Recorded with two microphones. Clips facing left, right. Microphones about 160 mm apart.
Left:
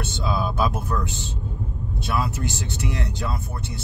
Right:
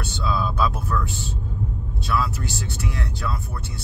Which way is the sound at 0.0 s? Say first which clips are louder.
Even; 20° left (ahead or behind).